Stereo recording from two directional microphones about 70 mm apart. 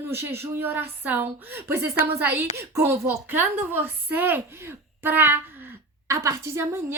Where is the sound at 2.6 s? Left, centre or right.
Right.